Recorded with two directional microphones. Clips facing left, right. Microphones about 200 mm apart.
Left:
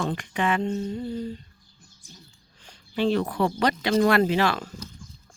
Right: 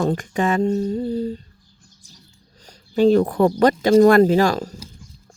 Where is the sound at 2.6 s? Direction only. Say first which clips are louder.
Right 9 dB; 40° right (ahead or behind).